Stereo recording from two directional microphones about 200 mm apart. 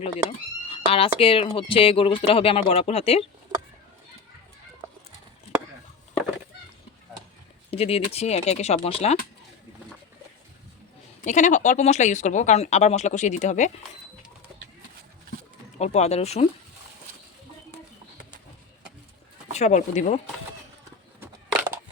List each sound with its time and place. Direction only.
0.0 s speech: 30° left (ahead or behind)
7.7 s speech: 30° left (ahead or behind)
11.2 s speech: 40° left (ahead or behind)
15.8 s speech: 35° left (ahead or behind)
19.5 s speech: 35° left (ahead or behind)